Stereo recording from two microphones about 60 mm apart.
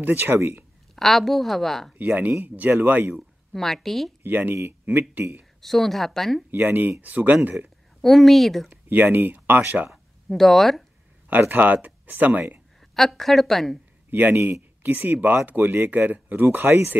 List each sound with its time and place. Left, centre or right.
0.0 s speech: right
0.9 s a woman's voice: centre
2.0 s speech: right
3.5 s a woman's voice: centre
4.2 s speech: right
5.6 s a woman's voice: centre
6.5 s speech: right
8.0 s a woman's voice: centre
8.8 s speech: right
10.3 s a woman's voice: centre
11.2 s speech: right
12.9 s a woman's voice: centre
14.4 s speech: right